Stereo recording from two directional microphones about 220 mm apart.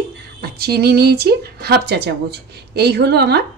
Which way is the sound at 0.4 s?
45° right (ahead or behind).